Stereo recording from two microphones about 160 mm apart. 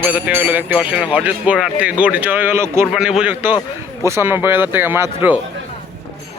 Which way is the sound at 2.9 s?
5° right (ahead or behind).